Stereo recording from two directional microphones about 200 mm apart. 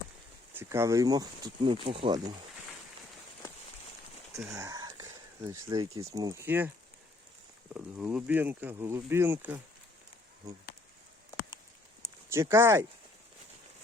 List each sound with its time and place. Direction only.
0.5 s speech: 15° right (ahead or behind)
4.5 s speech: 15° right (ahead or behind)
7.7 s speech: 5° right (ahead or behind)
12.3 s speech: 15° right (ahead or behind)